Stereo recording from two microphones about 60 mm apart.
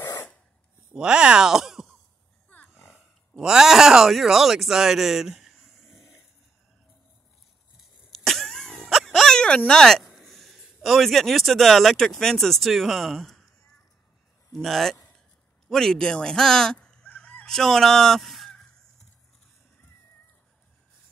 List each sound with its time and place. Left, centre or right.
0.0 s dog: left
0.9 s a sound: centre
3.3 s speech: centre
8.1 s throat clearing: centre
9.7 s speech: centre
14.5 s fowl: centre
15.7 s honk: centre
17.5 s fowl: centre
18.5 s crow: centre